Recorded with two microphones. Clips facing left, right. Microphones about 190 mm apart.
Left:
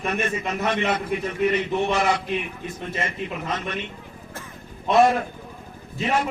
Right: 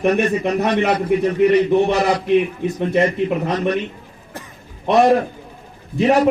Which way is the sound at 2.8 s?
65° right (ahead or behind).